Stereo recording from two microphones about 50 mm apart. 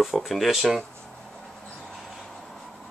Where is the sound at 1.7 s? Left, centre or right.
Centre.